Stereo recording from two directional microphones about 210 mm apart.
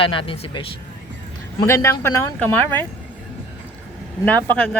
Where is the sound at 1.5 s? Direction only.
15° left (ahead or behind).